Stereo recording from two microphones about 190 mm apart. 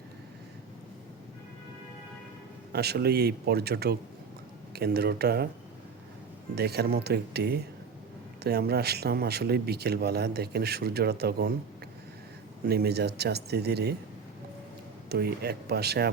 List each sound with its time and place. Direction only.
2.7 s a man's voice: 55° right (ahead or behind)
6.6 s a man's voice: 55° right (ahead or behind)
12.6 s a man's voice: 55° right (ahead or behind)
15.1 s a man's voice: 55° right (ahead or behind)